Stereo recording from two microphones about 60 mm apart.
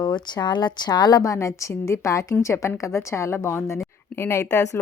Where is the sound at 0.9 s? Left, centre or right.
Left.